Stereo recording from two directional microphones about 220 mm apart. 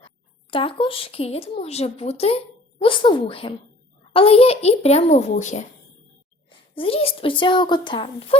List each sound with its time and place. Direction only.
0.5 s speech: 25° left (ahead or behind)